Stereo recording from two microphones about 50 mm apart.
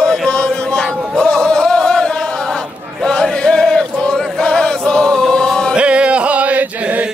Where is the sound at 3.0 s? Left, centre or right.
Centre.